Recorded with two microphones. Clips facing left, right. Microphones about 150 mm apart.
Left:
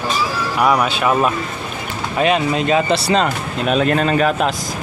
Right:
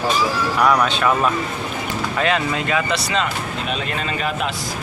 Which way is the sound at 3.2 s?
50° left (ahead or behind).